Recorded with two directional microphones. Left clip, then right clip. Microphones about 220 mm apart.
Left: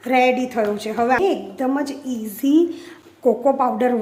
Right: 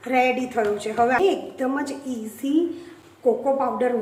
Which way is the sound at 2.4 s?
40° left (ahead or behind).